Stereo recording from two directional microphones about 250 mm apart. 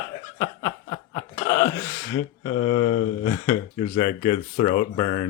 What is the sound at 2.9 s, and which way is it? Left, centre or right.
Speech, left.